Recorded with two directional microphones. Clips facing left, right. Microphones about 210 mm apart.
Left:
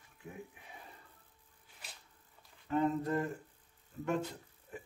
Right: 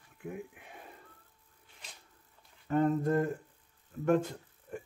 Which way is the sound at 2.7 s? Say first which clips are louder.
Right 4 dB; 50° right (ahead or behind).